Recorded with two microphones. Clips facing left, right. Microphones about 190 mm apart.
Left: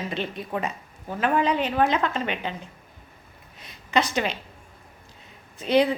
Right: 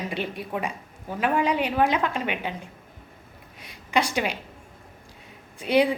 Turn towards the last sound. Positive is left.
turn(degrees=-10)  # may be behind; listen again after turning